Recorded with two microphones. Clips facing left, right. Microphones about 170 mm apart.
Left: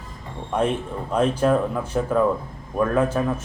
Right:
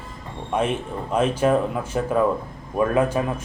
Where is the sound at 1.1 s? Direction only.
5° right (ahead or behind).